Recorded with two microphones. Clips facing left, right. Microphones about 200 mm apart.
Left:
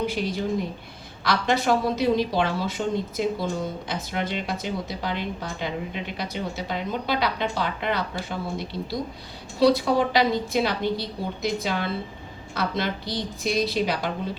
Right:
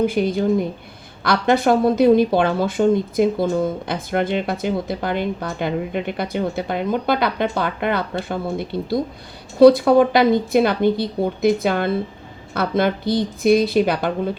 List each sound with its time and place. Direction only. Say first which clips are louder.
0.0 s speech: right 8 dB; 50° right (ahead or behind)